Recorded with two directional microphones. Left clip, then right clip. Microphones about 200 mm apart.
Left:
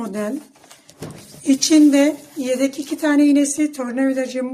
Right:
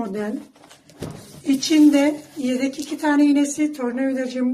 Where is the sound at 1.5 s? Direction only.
55° left (ahead or behind).